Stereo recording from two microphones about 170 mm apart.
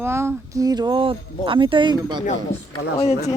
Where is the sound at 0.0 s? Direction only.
15° right (ahead or behind).